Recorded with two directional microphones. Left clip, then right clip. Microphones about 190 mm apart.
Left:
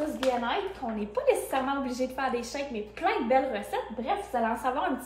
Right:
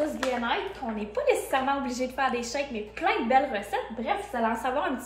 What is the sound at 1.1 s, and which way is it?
A woman's voice, 20° left (ahead or behind).